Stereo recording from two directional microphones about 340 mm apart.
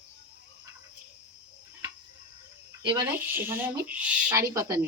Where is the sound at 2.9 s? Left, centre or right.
Centre.